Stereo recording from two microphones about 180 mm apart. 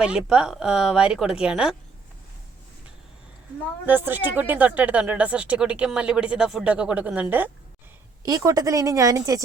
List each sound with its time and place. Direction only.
0.0 s speech: 5° right (ahead or behind)
3.8 s a woman's voice: 10° right (ahead or behind)